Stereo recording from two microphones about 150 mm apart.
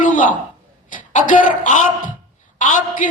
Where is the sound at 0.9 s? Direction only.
60° left (ahead or behind).